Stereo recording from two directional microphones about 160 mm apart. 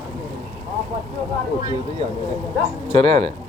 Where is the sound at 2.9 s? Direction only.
35° right (ahead or behind).